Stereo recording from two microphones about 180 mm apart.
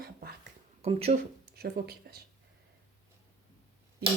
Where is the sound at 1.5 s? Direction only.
60° right (ahead or behind).